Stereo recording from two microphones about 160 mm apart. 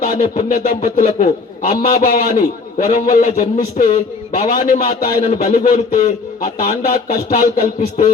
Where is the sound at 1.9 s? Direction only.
65° left (ahead or behind); by 4.5 s 45° left (ahead or behind).